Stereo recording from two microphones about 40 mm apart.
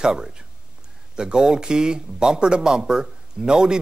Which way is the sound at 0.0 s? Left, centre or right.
Centre.